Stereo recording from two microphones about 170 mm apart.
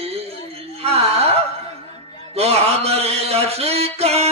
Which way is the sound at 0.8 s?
35° right (ahead or behind).